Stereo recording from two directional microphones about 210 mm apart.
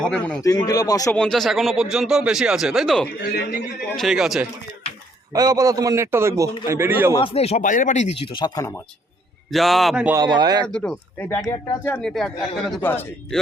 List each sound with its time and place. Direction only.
0.0 s speech: 5° left (ahead or behind)
0.4 s speech: 15° left (ahead or behind)
1.1 s speech: 5° left (ahead or behind)
5.3 s a man's voice: 15° right (ahead or behind)
7.1 s speech: 25° left (ahead or behind)
9.5 s speech: centre (ahead or behind)
10.2 s speech: 20° right (ahead or behind)
10.7 s speech: 5° left (ahead or behind)